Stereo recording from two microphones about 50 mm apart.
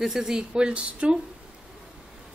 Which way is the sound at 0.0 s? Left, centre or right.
Centre.